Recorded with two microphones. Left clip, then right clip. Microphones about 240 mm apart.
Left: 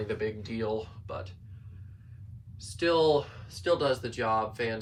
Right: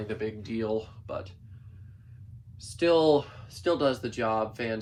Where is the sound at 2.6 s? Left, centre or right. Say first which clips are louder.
Right 2 dB; centre.